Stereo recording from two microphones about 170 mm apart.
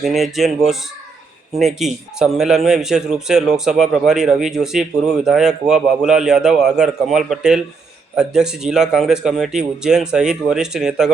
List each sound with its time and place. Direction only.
0.0 s a man's voice: centre (ahead or behind)